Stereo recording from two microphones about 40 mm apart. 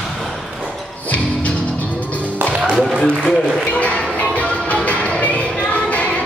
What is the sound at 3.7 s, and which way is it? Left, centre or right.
Music, left.